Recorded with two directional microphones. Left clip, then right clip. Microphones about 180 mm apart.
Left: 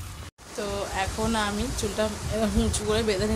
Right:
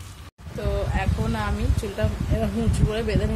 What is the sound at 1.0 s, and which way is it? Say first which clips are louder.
Speech: left 2 dB; centre (ahead or behind).